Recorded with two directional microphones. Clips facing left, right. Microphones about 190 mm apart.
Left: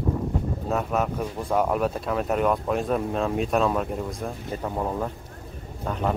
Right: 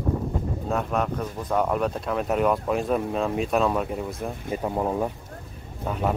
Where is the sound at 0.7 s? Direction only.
5° left (ahead or behind).